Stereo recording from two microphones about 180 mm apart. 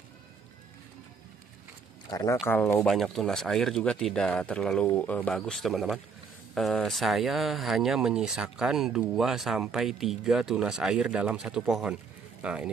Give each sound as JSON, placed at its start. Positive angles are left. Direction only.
{"t": 2.0, "sound": "speech", "side_deg": 20}
{"t": 2.4, "sound": "speech", "side_deg": 10}